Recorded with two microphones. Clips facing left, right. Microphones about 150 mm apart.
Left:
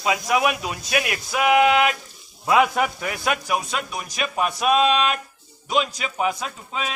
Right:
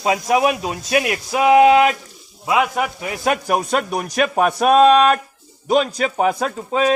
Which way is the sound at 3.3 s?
45° right (ahead or behind).